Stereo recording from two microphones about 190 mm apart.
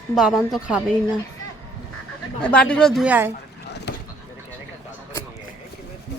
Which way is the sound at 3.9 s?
65° left (ahead or behind).